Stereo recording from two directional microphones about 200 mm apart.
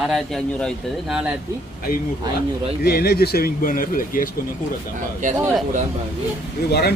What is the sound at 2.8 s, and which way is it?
Speech, 50° left (ahead or behind).